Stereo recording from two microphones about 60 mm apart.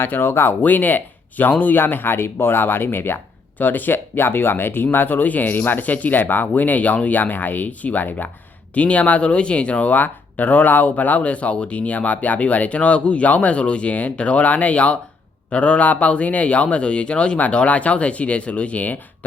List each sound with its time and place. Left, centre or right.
0.0 s speech: left